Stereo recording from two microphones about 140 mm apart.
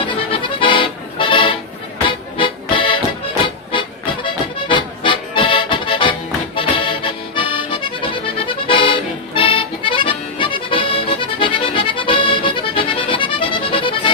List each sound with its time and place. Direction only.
0.3 s music: 35° left (ahead or behind)
6.6 s accordion: 40° left (ahead or behind)